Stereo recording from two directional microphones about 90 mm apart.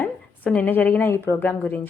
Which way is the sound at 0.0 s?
20° left (ahead or behind).